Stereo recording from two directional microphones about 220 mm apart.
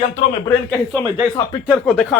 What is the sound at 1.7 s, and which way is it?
Speech, 5° left (ahead or behind).